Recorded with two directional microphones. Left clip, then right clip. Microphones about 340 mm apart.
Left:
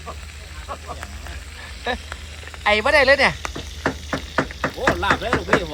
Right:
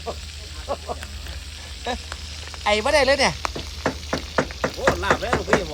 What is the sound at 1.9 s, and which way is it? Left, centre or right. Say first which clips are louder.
Speech: left 3 dB; centre.